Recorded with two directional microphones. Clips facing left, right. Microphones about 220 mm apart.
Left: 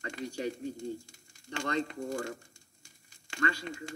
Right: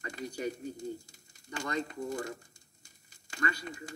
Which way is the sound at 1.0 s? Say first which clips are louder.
Left 3 dB; 25° left (ahead or behind).